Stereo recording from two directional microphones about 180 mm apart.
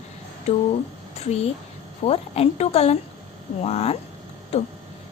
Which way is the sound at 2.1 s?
35° left (ahead or behind).